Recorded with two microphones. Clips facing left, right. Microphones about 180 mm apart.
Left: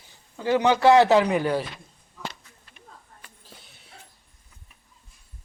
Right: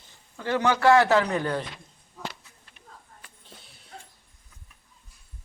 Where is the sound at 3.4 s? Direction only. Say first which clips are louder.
Even; centre (ahead or behind).